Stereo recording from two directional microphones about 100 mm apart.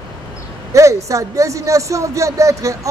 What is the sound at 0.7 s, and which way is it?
A woman's voice, 30° right (ahead or behind).